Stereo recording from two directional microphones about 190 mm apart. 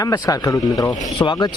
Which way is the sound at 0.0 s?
20° left (ahead or behind).